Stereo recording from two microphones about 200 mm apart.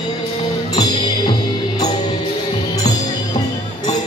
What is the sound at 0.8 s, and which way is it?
Music, 20° left (ahead or behind).